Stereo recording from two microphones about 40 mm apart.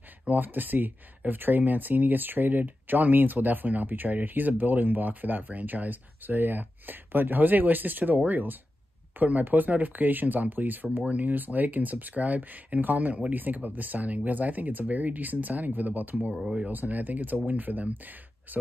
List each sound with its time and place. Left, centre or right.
0.3 s speech: right